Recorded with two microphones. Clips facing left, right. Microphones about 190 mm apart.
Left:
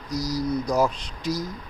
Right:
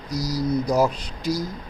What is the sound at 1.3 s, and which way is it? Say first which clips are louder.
Speech: right 2 dB; 20° left (ahead or behind).